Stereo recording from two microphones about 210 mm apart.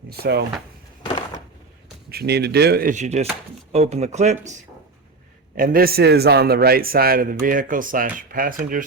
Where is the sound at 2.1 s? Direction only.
50° right (ahead or behind); by 4.6 s 35° right (ahead or behind).